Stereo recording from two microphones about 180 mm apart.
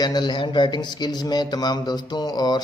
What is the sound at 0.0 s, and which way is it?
A man's voice, 25° left (ahead or behind).